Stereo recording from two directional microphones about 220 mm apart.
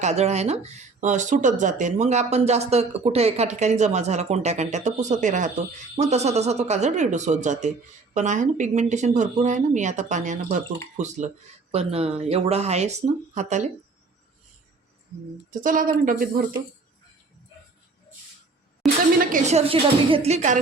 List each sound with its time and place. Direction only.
0.0 s a woman's voice: 30° right (ahead or behind)
15.4 s speech: 35° right (ahead or behind)
18.8 s a sound: centre (ahead or behind)
19.3 s a woman's voice: 30° right (ahead or behind)